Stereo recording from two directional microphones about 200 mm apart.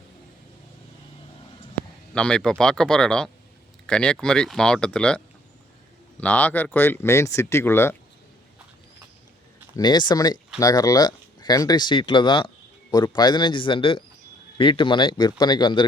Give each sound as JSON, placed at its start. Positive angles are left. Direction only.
{"t": 2.1, "sound": "speech", "side_deg": 5}
{"t": 9.7, "sound": "speech", "side_deg": 20}